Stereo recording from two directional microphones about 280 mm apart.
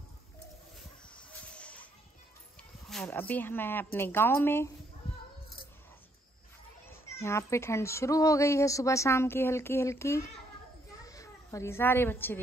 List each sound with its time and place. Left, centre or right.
0.7 s a sound: centre
2.9 s a woman's voice: centre
7.2 s a woman's voice: centre